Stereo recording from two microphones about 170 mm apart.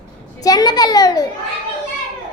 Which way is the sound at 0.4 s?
25° left (ahead or behind).